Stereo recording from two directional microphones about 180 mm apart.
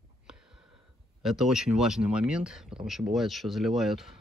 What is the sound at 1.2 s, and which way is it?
Speech, centre (ahead or behind).